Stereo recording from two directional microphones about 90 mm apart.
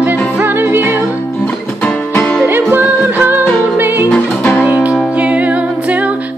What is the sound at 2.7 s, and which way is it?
Music, 20° right (ahead or behind).